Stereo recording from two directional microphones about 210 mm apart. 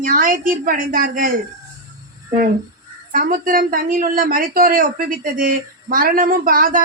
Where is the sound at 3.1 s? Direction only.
40° right (ahead or behind).